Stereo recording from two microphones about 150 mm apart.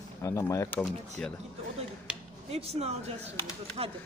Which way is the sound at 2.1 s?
5° right (ahead or behind).